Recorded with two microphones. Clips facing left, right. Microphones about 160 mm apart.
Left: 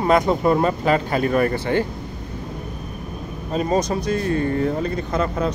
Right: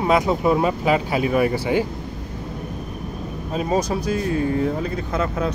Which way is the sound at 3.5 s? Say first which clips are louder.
Left 1 dB; 5° right (ahead or behind).